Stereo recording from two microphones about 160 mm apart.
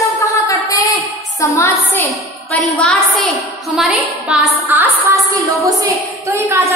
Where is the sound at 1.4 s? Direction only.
15° left (ahead or behind).